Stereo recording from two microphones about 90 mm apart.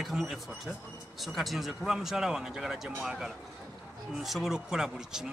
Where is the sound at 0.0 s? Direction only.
Centre (ahead or behind).